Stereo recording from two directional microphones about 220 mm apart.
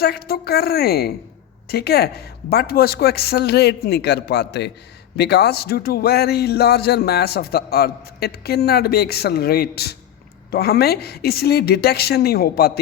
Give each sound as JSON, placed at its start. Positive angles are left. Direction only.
{"t": 0.0, "sound": "a man's voice", "side_deg": 45}